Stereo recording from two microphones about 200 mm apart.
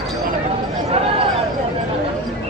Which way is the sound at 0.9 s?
30° right (ahead or behind).